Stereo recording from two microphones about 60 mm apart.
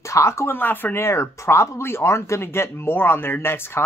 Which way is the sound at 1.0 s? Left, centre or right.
Left.